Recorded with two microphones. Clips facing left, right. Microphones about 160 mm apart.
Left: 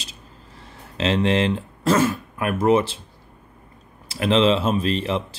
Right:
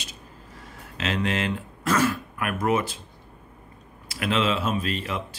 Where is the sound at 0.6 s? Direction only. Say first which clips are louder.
Left 7 dB; 30° left (ahead or behind).